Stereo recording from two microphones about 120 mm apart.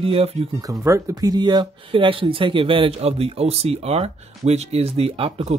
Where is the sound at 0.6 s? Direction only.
30° right (ahead or behind).